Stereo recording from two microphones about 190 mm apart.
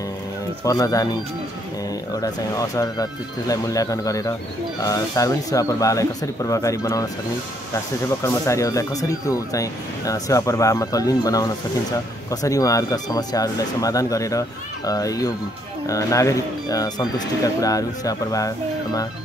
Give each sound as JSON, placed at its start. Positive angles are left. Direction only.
{"t": 0.7, "sound": "speech", "side_deg": 20}
{"t": 2.2, "sound": "speech", "side_deg": 15}
{"t": 8.2, "sound": "speech", "side_deg": 15}